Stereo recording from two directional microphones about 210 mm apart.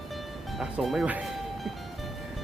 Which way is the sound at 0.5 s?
Centre (ahead or behind).